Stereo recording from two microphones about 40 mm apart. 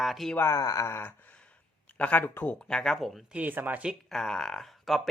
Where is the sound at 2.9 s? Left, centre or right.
Centre.